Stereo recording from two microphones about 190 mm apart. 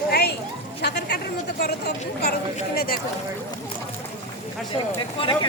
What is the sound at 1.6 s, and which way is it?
Speech, 60° left (ahead or behind).